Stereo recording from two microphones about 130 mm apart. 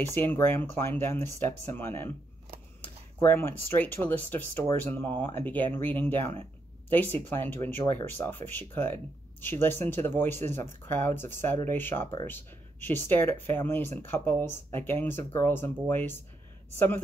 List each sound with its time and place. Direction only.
0.1 s speech: 15° left (ahead or behind)